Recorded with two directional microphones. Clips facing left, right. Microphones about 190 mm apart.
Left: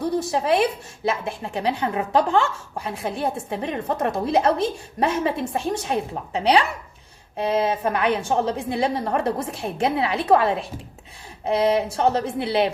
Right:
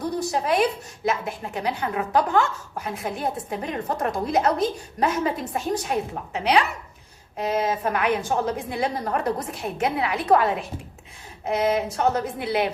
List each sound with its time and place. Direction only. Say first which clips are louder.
0.2 s a woman's voice: even; 25° left (ahead or behind)